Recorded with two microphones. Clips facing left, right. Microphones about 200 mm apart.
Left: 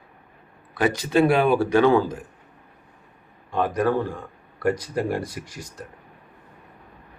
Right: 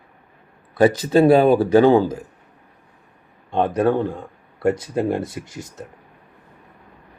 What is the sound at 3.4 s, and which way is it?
Speech, 25° right (ahead or behind).